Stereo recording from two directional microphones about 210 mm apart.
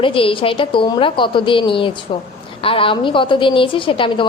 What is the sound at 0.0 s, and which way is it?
A woman's voice, 25° left (ahead or behind).